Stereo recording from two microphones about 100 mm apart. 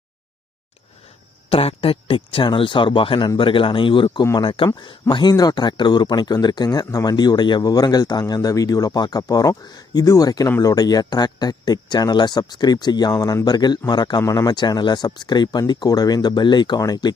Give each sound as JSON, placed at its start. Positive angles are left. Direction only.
{"t": 1.5, "sound": "speech", "side_deg": 70}